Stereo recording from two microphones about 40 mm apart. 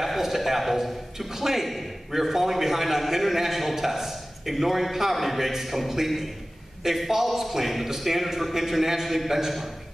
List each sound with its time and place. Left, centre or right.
0.0 s a man's voice: centre